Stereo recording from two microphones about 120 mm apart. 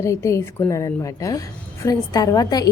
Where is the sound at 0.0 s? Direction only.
25° left (ahead or behind).